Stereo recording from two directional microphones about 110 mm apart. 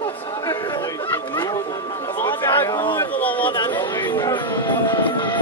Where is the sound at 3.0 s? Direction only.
15° left (ahead or behind).